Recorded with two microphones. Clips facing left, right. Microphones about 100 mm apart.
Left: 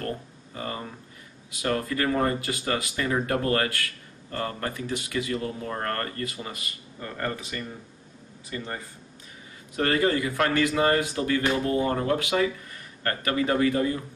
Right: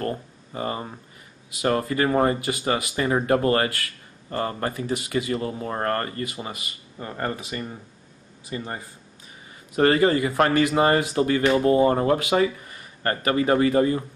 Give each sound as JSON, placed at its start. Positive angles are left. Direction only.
{"t": 0.6, "sound": "speech", "side_deg": -25}
{"t": 8.5, "sound": "speech", "side_deg": -25}